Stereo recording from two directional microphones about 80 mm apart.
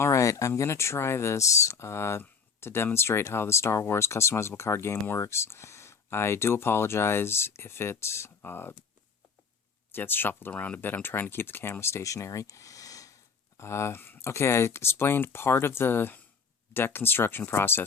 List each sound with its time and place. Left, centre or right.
0.0 s speech: left
9.9 s speech: left